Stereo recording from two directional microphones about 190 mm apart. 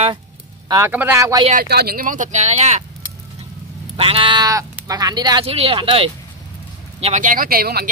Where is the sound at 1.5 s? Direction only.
55° right (ahead or behind); by 2.8 s 35° right (ahead or behind).